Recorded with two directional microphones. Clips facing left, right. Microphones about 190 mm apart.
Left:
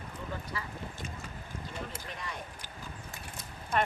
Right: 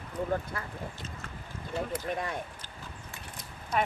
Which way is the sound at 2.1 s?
55° right (ahead or behind).